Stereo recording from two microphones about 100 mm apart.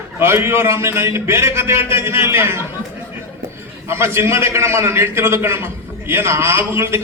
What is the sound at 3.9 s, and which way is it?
A man's voice, 25° right (ahead or behind).